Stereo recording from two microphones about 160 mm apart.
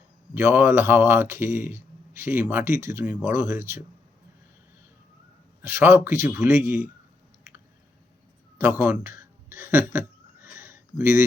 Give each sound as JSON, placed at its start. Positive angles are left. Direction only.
{"t": 0.3, "sound": "speech", "side_deg": -15}
{"t": 5.6, "sound": "speech", "side_deg": -15}
{"t": 8.5, "sound": "a sound", "side_deg": -15}